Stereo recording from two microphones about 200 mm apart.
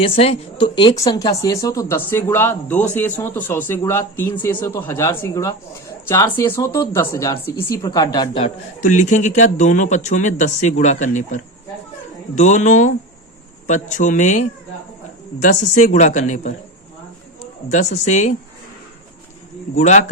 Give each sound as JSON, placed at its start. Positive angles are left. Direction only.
{"t": 0.0, "sound": "speech", "side_deg": 30}
{"t": 8.4, "sound": "a man's voice", "side_deg": 35}
{"t": 15.4, "sound": "a man's voice", "side_deg": 35}
{"t": 17.7, "sound": "a man's voice", "side_deg": 35}
{"t": 19.7, "sound": "a man's voice", "side_deg": 35}